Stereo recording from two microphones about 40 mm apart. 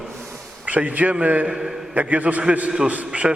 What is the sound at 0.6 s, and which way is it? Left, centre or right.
A man's voice, right.